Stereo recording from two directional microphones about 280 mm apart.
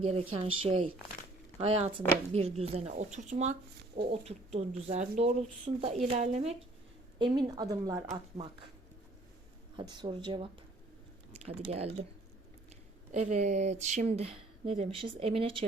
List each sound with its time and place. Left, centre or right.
0.0 s speech: right
9.7 s speech: centre
13.1 s speech: right